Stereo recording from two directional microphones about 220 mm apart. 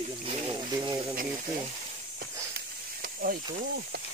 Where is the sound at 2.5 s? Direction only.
40° right (ahead or behind).